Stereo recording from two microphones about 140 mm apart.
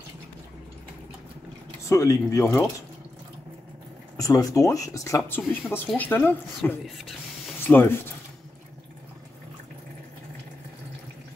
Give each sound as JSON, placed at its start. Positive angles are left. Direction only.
{"t": 1.9, "sound": "speech", "side_deg": 20}
{"t": 4.2, "sound": "speech", "side_deg": 25}